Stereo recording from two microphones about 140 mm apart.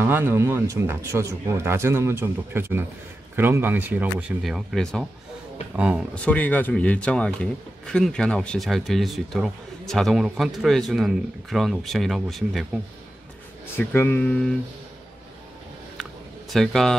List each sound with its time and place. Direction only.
0.0 s speech: 15° right (ahead or behind)
4.4 s speech: centre (ahead or behind)
6.1 s speech: 10° left (ahead or behind)
13.7 s speech: 15° left (ahead or behind)
16.0 s a sound: centre (ahead or behind)